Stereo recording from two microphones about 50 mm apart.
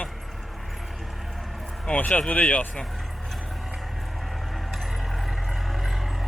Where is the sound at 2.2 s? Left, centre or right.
Left.